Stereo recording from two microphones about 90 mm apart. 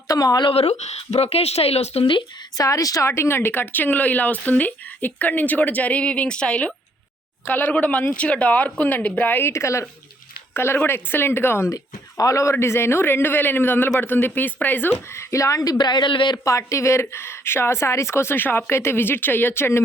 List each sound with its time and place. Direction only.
0.1 s speech: 40° left (ahead or behind)
0.4 s speech: 90° left
2.6 s speech: 40° left (ahead or behind)
3.1 s speech: 25° left (ahead or behind)
15.8 s speech: 55° left (ahead or behind)
16.4 s speech: 35° left (ahead or behind)